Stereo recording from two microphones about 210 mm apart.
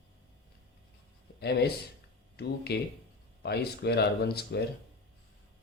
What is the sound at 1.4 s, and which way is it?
Speech, 50° left (ahead or behind).